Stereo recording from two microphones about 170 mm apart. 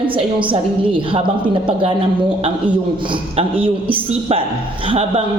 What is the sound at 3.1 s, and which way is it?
A woman's voice, 30° right (ahead or behind).